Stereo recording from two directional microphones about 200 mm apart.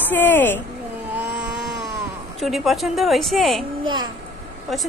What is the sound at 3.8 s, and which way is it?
Speech, 20° right (ahead or behind).